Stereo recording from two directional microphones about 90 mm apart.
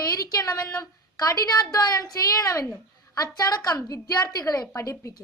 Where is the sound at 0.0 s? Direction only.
40° left (ahead or behind).